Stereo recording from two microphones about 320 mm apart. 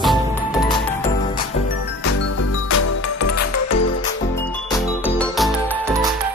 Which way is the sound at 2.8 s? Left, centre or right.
Left.